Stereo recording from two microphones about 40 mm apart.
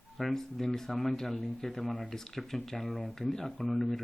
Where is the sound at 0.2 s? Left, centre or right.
Centre.